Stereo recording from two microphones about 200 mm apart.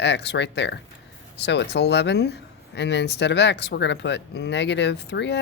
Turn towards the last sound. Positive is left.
turn(degrees=60)  # may be behind; listen again after turning